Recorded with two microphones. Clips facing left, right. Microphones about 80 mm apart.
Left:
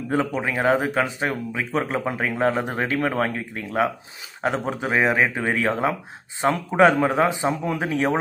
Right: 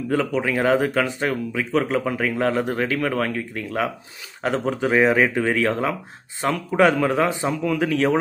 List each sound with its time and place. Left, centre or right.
0.1 s speech: left